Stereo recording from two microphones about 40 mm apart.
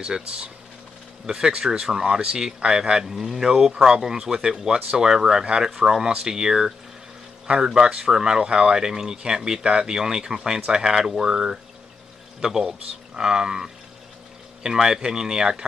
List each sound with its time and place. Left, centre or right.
0.0 s speech: right